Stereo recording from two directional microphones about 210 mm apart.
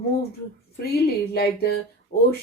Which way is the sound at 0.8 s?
50° left (ahead or behind).